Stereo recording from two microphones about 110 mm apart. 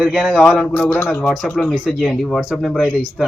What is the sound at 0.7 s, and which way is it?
Speech, 15° left (ahead or behind).